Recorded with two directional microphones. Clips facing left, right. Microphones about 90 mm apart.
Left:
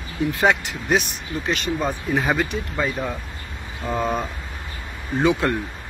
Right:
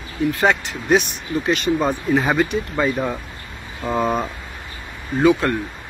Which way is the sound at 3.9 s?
30° right (ahead or behind).